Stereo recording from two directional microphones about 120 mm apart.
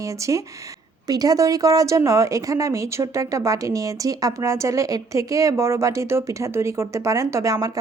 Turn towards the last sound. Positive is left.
turn(degrees=-25)  # may be behind; listen again after turning